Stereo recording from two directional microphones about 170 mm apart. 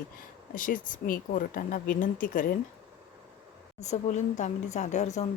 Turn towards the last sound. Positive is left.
turn(degrees=40)  # may be behind; listen again after turning